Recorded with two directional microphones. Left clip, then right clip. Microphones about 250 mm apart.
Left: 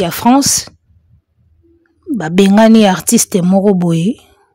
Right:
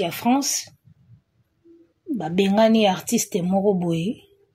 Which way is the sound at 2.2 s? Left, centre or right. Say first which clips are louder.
Left 9 dB; left.